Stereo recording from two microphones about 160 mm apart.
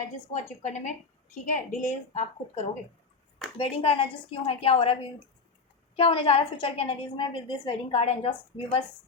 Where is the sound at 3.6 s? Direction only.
35° left (ahead or behind).